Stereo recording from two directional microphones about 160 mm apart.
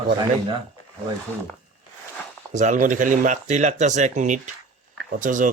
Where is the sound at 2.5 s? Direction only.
50° right (ahead or behind).